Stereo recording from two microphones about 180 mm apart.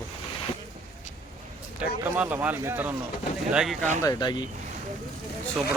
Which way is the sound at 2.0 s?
10° right (ahead or behind).